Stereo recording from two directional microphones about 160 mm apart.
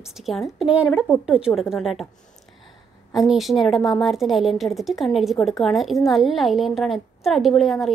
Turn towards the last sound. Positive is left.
turn(degrees=0)  # may be behind; listen again after turning